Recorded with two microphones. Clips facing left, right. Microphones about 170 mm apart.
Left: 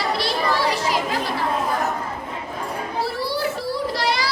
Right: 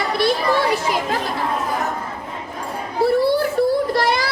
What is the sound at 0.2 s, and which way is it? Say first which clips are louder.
Children playing: right 4 dB; 50° right (ahead or behind).